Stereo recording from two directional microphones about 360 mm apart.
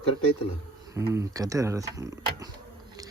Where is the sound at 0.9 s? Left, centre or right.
Centre.